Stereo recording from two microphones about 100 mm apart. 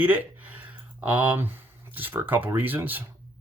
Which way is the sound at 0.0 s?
20° right (ahead or behind).